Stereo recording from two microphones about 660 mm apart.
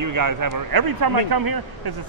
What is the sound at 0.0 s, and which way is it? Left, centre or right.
Speech, right.